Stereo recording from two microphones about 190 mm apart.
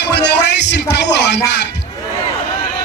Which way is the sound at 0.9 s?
60° left (ahead or behind).